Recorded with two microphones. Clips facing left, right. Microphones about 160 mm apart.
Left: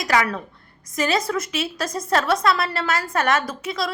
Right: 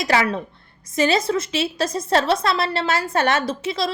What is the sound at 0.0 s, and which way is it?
A woman's voice, 30° right (ahead or behind).